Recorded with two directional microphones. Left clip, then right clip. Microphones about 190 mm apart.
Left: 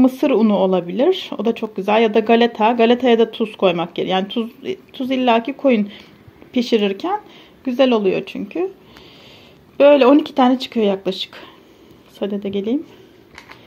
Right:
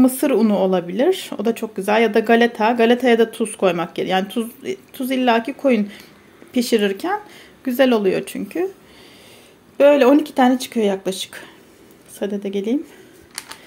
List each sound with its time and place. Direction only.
0.0 s speech: 10° right (ahead or behind)
9.8 s speech: 10° right (ahead or behind)